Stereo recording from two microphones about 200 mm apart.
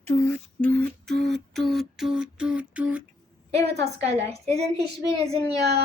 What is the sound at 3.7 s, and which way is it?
Speech, 60° right (ahead or behind).